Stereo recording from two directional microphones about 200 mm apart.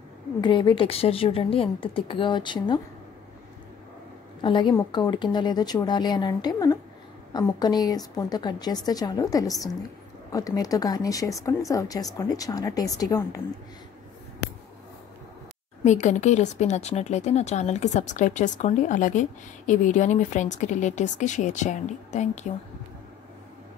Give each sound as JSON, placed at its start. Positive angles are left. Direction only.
{"t": 0.4, "sound": "speech", "side_deg": 25}
{"t": 4.4, "sound": "speech", "side_deg": 25}
{"t": 15.8, "sound": "speech", "side_deg": 35}